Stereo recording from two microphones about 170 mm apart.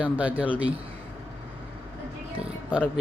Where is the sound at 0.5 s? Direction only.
35° right (ahead or behind).